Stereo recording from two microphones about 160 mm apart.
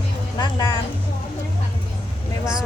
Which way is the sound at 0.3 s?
25° left (ahead or behind).